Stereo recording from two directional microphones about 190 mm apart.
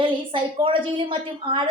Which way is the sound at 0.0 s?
25° right (ahead or behind).